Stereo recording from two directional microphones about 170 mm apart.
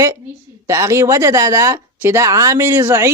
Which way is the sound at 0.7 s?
15° right (ahead or behind).